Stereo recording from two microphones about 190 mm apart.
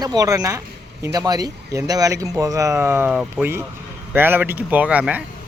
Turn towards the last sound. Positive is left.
turn(degrees=-5)  # may be behind; listen again after turning